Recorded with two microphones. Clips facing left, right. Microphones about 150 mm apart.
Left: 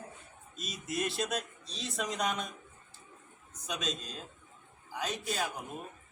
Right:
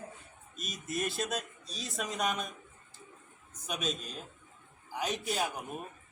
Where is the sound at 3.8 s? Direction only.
5° right (ahead or behind).